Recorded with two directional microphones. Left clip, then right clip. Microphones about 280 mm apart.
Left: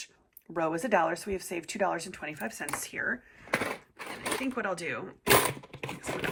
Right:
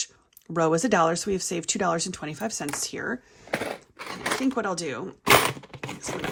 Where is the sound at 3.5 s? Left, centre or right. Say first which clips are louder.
Right 1 dB; centre.